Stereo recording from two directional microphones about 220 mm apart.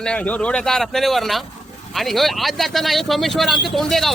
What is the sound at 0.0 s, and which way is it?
Speech, 5° left (ahead or behind).